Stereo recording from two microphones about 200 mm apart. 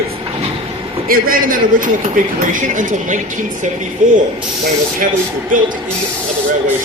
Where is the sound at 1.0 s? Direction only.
45° right (ahead or behind).